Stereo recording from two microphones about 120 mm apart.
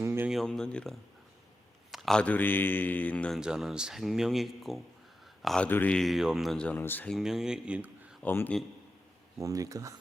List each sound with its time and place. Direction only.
0.0 s a sound: 20° right (ahead or behind)
0.3 s speech: centre (ahead or behind)
3.4 s a man's voice: 5° right (ahead or behind)
5.6 s speech: 15° left (ahead or behind)
6.0 s speech: centre (ahead or behind); by 7.1 s 15° left (ahead or behind)
7.1 s speech: 5° right (ahead or behind)
8.2 s speech: 15° left (ahead or behind)
9.4 s speech: 30° right (ahead or behind)